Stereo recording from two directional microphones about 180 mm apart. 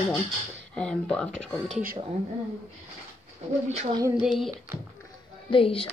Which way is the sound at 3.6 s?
40° right (ahead or behind).